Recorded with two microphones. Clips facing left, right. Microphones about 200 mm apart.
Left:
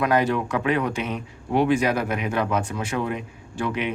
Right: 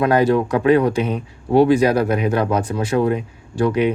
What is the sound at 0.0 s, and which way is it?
Speech, 35° right (ahead or behind).